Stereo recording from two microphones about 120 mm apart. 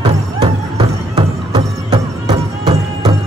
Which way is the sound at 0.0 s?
50° right (ahead or behind).